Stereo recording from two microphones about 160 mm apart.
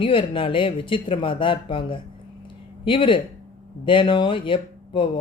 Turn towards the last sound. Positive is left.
turn(degrees=30)  # may be behind; listen again after turning